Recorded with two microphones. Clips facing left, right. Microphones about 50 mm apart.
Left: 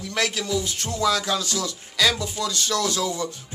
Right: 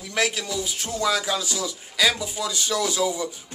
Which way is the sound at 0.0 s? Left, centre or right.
Centre.